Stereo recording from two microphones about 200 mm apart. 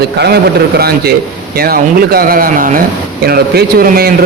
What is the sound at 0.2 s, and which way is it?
A man's voice, 55° right (ahead or behind).